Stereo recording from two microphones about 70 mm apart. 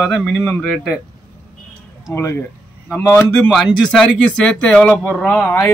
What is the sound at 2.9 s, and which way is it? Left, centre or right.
Speech, left.